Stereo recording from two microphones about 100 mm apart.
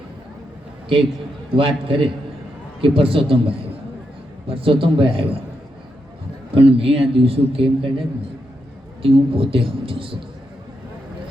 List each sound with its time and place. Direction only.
1.5 s speech: 60° right (ahead or behind)
6.5 s a man's voice: 70° right (ahead or behind)